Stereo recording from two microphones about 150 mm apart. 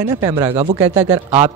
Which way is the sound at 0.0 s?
25° right (ahead or behind).